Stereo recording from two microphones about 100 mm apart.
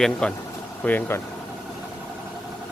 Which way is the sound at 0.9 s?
20° left (ahead or behind).